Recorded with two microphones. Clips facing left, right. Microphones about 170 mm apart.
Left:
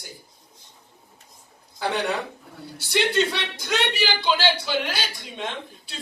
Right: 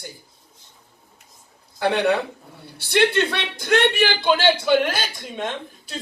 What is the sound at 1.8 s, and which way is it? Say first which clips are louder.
A man's voice: right 6 dB; 65° right (ahead or behind).